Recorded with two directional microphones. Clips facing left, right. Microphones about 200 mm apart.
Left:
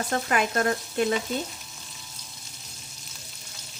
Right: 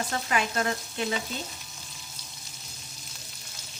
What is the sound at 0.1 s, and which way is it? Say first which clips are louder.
Frying: left 4 dB; 50° left (ahead or behind).